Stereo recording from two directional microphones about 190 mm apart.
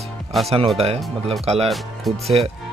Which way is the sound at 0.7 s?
30° right (ahead or behind).